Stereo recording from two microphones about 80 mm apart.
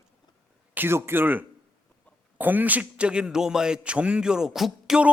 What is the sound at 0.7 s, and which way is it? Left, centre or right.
A man's voice, right.